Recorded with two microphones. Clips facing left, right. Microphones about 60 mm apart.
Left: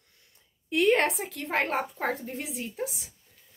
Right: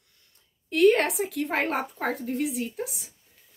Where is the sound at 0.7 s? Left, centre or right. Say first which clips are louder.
Right 3 dB; centre.